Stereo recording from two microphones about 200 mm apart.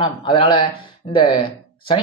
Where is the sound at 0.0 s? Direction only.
25° left (ahead or behind).